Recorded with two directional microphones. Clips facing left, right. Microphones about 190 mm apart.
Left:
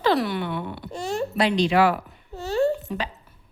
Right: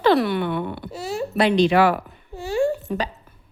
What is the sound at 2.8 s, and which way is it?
Speech, 40° right (ahead or behind).